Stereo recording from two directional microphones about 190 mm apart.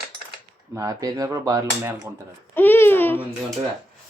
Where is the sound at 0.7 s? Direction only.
20° right (ahead or behind).